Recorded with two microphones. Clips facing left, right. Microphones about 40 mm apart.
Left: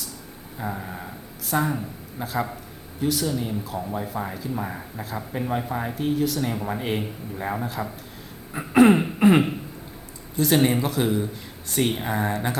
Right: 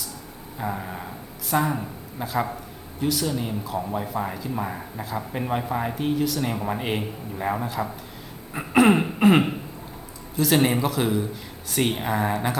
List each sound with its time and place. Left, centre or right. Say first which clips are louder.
0.6 s a man's voice: right 2 dB; centre
3.2 s speech: even; centre
4.0 s a man's voice: right 1 dB; centre
5.3 s a man's voice: even; centre